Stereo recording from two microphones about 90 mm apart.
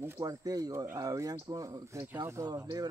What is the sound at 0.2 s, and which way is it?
Speech, 40° right (ahead or behind).